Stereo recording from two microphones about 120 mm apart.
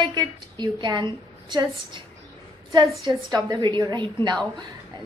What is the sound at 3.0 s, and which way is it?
A woman's voice, 35° right (ahead or behind).